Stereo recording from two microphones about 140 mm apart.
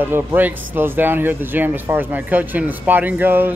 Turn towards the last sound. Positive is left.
turn(degrees=-15)  # may be behind; listen again after turning